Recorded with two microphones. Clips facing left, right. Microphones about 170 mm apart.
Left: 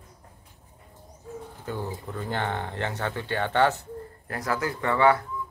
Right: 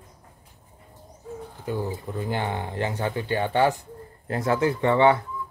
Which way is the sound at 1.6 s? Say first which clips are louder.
Right 4 dB; 15° right (ahead or behind).